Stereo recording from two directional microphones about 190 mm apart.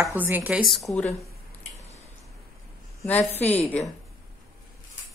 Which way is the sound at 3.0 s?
10° left (ahead or behind).